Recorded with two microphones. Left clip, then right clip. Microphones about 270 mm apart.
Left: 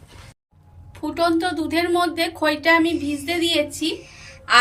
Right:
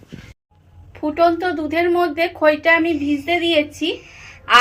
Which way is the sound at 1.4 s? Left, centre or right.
Right.